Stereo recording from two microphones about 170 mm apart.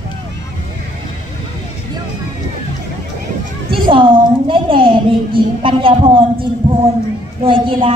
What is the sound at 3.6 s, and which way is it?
A woman's voice, 30° right (ahead or behind).